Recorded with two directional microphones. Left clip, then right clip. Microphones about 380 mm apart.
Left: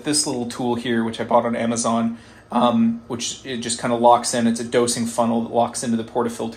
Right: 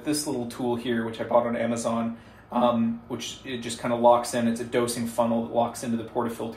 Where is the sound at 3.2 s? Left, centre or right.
Left.